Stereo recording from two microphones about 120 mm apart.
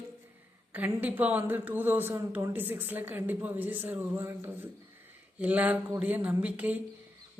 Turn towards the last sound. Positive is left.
turn(degrees=-15)  # may be behind; listen again after turning